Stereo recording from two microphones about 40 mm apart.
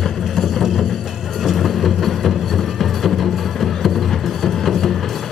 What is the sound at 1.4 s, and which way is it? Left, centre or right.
Music, centre.